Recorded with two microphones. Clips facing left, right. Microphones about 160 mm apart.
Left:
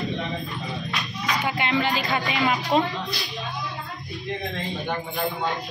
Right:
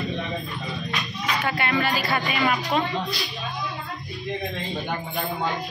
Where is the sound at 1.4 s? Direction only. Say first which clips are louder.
Even; 15° left (ahead or behind).